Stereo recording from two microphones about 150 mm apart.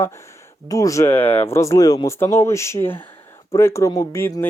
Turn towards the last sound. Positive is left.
turn(degrees=15)  # may be behind; listen again after turning